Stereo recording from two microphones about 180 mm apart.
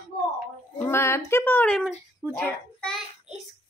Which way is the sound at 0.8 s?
15° left (ahead or behind).